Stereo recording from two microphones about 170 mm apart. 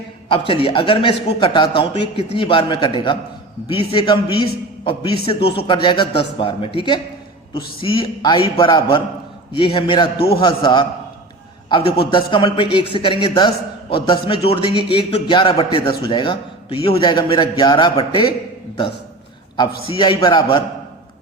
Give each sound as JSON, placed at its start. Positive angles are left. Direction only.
{"t": 0.3, "sound": "a man's voice", "side_deg": 30}
{"t": 11.9, "sound": "a man's voice", "side_deg": 30}
{"t": 19.5, "sound": "a man's voice", "side_deg": 30}